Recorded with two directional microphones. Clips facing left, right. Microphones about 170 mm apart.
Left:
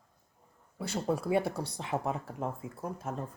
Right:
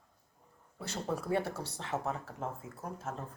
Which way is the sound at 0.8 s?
10° left (ahead or behind).